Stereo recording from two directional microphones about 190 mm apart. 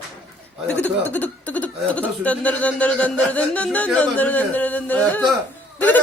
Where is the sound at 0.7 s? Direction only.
10° left (ahead or behind).